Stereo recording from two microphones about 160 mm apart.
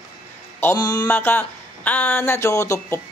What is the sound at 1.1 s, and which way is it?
Speech, 15° left (ahead or behind).